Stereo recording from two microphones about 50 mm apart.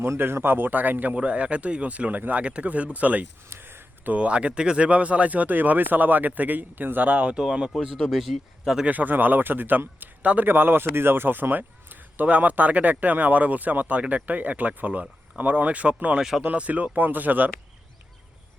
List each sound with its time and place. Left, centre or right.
0.0 s speech: right
3.5 s a sound: right
4.1 s speech: right
4.9 s a man's voice: right
7.1 s speech: right
8.1 s speech: centre
8.6 s a man's voice: centre
8.9 s a man's voice: right